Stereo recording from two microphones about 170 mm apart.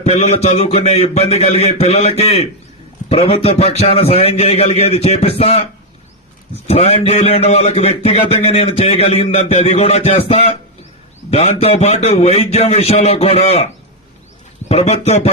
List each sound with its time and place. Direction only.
0.0 s a man's voice: 40° left (ahead or behind)
6.7 s a man's voice: 35° left (ahead or behind)
14.7 s a man's voice: 35° left (ahead or behind)